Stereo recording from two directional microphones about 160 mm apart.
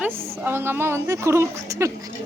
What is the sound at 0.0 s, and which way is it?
A woman's voice, 15° right (ahead or behind).